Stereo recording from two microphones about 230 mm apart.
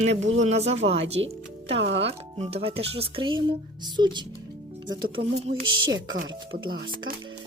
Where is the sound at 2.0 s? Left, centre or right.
Right.